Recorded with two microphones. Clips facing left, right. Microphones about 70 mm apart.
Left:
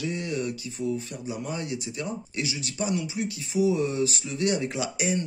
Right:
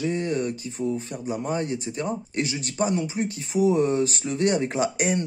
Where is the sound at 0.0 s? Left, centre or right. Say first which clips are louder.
Right 4 dB; right.